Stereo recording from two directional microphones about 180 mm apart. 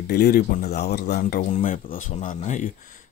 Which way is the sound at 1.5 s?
50° left (ahead or behind).